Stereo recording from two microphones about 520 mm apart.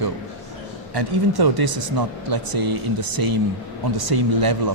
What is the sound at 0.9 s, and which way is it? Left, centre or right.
Speech, right.